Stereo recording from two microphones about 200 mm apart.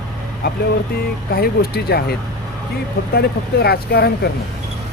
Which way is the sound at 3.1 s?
50° left (ahead or behind).